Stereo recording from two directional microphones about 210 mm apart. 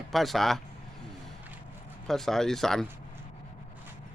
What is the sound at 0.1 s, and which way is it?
Speech, centre (ahead or behind).